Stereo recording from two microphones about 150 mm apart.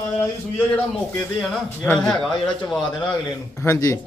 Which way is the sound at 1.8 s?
10° left (ahead or behind).